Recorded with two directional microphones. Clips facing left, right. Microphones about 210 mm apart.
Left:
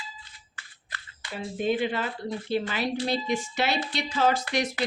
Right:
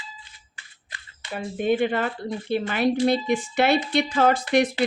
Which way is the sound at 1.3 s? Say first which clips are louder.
Right 4 dB; 55° right (ahead or behind).